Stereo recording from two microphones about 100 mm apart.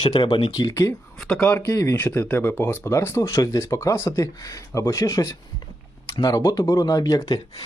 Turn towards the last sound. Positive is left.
turn(degrees=45)  # may be behind; listen again after turning